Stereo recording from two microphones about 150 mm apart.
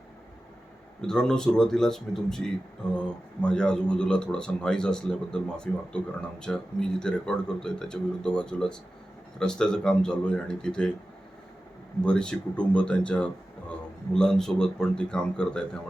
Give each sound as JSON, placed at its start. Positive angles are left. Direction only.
{"t": 1.0, "sound": "a man's voice", "side_deg": 5}
{"t": 12.0, "sound": "a man's voice", "side_deg": 5}